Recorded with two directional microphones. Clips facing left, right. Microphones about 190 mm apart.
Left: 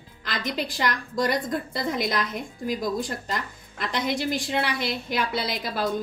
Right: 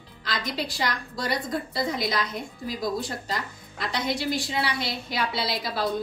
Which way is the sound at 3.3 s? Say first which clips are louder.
Left 1 dB; 55° left (ahead or behind).